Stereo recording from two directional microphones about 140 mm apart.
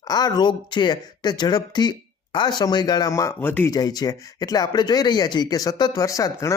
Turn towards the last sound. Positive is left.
turn(degrees=25)  # may be behind; listen again after turning